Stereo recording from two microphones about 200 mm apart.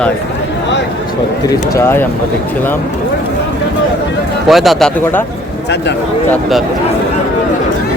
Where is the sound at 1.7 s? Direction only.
10° left (ahead or behind).